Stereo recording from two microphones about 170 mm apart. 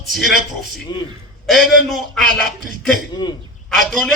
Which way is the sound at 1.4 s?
Centre (ahead or behind).